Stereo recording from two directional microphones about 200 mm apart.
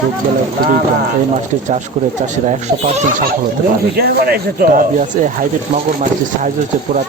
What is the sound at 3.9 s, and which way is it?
Speech, 50° right (ahead or behind).